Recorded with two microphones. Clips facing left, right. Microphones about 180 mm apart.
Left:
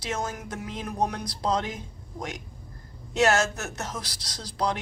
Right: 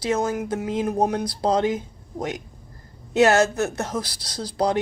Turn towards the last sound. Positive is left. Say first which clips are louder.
# right 6 dB
turn(degrees=-30)  # may be behind; listen again after turning